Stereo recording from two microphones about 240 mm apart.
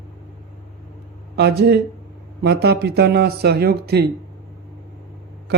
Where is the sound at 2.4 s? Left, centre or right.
Right.